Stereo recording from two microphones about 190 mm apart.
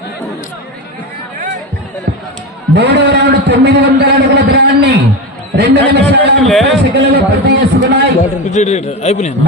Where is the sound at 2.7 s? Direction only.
65° right (ahead or behind).